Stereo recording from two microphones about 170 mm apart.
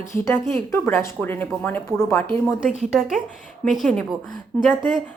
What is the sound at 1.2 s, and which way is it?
A woman's voice, 10° left (ahead or behind).